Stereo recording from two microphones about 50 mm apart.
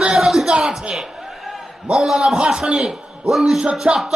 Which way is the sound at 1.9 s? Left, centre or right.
Centre.